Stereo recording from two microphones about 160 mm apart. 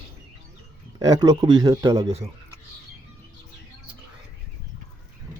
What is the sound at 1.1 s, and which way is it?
Speech, 25° right (ahead or behind).